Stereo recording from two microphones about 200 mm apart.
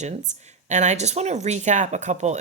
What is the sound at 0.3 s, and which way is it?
Speech, 35° right (ahead or behind).